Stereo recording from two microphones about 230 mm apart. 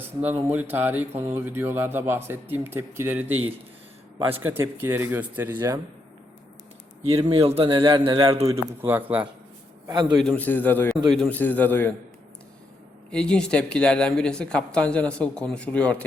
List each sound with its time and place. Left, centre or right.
0.2 s speech: centre
4.3 s speech: centre
7.0 s a man's voice: right
8.4 s a man's voice: centre
10.2 s a man's voice: centre
13.1 s speech: centre